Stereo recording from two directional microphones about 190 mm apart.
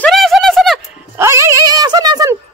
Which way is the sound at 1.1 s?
15° right (ahead or behind).